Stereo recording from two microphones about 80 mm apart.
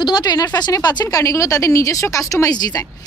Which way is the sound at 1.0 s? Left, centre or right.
Left.